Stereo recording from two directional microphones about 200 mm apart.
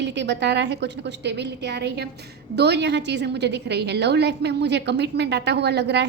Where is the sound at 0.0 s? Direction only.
60° right (ahead or behind).